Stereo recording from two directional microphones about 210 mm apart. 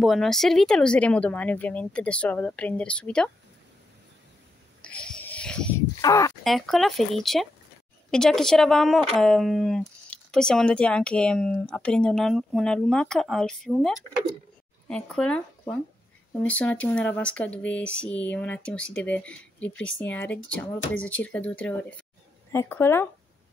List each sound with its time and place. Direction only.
0.0 s a woman's voice: centre (ahead or behind)
4.8 s a sound: 5° left (ahead or behind)
5.9 s speech: 15° left (ahead or behind)
6.4 s a woman's voice: centre (ahead or behind)